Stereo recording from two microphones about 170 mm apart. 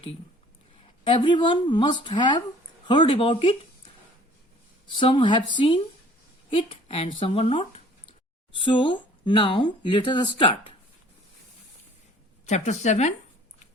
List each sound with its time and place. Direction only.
1.0 s speech: 30° left (ahead or behind)
4.9 s speech: 30° left (ahead or behind)
12.5 s a woman's voice: 40° left (ahead or behind)